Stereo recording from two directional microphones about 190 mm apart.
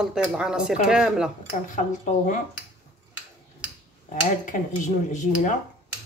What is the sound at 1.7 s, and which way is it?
Speech, 40° left (ahead or behind).